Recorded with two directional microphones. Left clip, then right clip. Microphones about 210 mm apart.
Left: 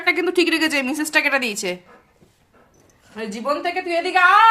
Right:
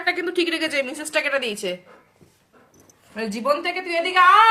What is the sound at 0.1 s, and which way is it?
A woman's voice, 55° left (ahead or behind).